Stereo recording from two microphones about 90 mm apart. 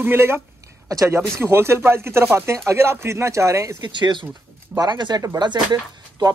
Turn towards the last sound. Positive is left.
turn(degrees=-55)  # may be behind; listen again after turning